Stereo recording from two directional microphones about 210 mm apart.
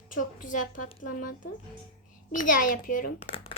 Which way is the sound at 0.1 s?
40° left (ahead or behind).